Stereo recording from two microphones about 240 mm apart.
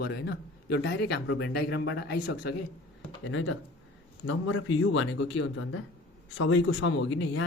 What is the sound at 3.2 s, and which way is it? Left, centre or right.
Speech, left.